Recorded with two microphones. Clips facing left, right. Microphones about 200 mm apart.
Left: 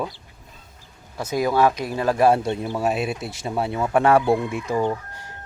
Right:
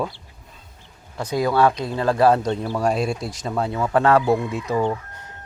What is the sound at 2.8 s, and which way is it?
Chicken, 5° left (ahead or behind).